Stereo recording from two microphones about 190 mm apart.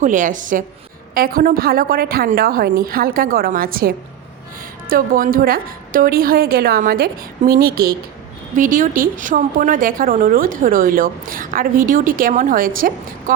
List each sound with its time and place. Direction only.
0.0 s a woman's voice: 45° right (ahead or behind)